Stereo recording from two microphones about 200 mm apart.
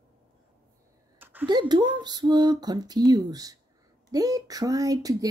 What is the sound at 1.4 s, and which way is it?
Speech, 20° right (ahead or behind).